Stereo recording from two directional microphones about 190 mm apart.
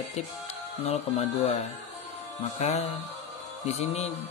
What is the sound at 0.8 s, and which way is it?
Speech, 30° left (ahead or behind).